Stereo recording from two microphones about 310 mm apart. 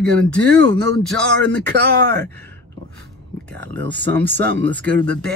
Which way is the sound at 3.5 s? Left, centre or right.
Right.